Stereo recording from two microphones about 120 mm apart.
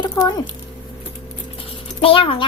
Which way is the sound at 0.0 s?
35° left (ahead or behind).